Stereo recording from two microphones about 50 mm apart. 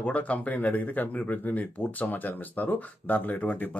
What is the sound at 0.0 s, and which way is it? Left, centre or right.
Speech, left.